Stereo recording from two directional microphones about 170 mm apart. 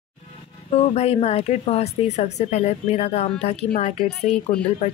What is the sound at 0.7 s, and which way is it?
Speech, 40° left (ahead or behind).